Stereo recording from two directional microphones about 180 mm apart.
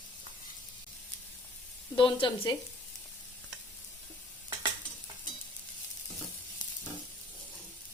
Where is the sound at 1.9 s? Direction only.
30° left (ahead or behind).